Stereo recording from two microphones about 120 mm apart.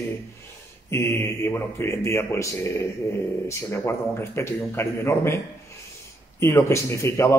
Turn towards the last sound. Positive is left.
turn(degrees=20)  # may be behind; listen again after turning